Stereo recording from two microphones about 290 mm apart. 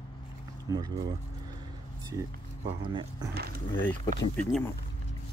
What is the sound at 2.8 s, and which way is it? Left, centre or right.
Speech, centre.